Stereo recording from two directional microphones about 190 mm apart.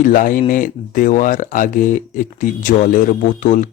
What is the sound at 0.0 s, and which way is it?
Speech, 45° left (ahead or behind).